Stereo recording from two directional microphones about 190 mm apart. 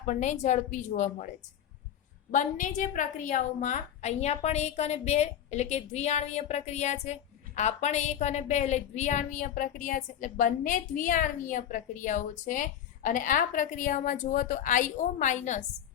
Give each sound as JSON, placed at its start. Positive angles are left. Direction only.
{"t": 0.0, "sound": "a woman's voice", "side_deg": 40}
{"t": 2.3, "sound": "a woman's voice", "side_deg": 40}